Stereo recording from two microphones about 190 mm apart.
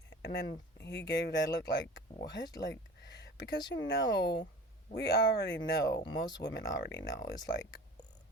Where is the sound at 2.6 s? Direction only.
65° left (ahead or behind).